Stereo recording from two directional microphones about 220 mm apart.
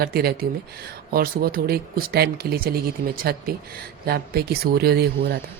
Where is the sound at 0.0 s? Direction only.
45° right (ahead or behind).